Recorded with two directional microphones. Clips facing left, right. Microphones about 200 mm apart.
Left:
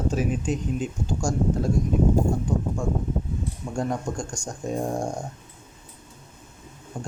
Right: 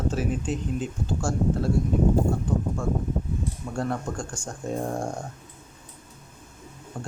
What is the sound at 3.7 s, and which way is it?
Speech, 15° left (ahead or behind).